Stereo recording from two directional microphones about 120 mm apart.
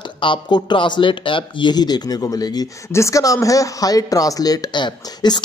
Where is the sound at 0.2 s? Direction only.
40° left (ahead or behind).